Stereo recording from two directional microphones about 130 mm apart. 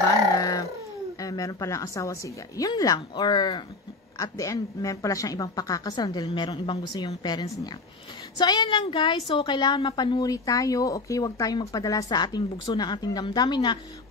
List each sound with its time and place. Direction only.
0.4 s dog: 30° left (ahead or behind)
1.2 s a woman's voice: 25° left (ahead or behind)